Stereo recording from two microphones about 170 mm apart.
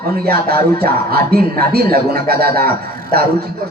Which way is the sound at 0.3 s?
65° right (ahead or behind).